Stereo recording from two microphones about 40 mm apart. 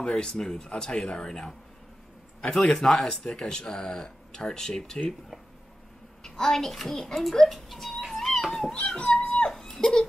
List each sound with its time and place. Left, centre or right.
0.0 s speech: centre
6.2 s speech: centre
8.2 s music: centre
8.7 s speech: left
9.2 s a sound: left
9.5 s giggle: centre